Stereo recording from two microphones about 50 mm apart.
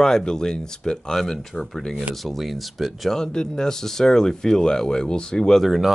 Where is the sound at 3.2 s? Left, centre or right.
Centre.